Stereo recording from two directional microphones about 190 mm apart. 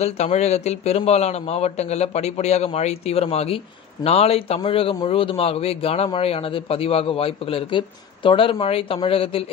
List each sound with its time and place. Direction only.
0.0 s a man's voice: 35° left (ahead or behind)